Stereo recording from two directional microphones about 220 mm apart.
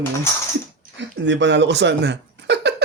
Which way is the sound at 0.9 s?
55° right (ahead or behind).